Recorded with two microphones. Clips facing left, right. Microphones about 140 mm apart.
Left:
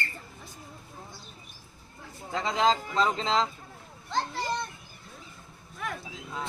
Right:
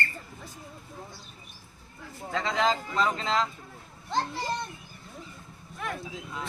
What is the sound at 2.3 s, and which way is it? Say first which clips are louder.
Speech: left 1 dB; 25° left (ahead or behind).